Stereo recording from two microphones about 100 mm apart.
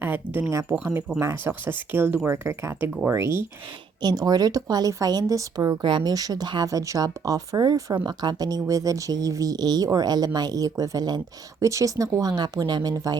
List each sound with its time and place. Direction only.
0.0 s speech: 20° right (ahead or behind)
0.8 s speech: 15° right (ahead or behind)
4.0 s speech: 40° right (ahead or behind)
5.8 s speech: 55° right (ahead or behind)
6.1 s speech: 40° right (ahead or behind)
12.4 s speech: 45° right (ahead or behind)